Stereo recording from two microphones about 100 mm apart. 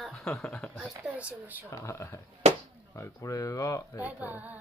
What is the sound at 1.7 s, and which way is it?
Speech, 30° left (ahead or behind).